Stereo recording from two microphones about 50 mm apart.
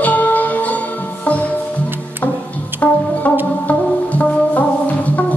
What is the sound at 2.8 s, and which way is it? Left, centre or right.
Music, left.